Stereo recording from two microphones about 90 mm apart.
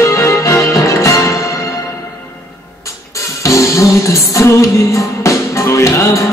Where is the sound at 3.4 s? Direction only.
35° left (ahead or behind).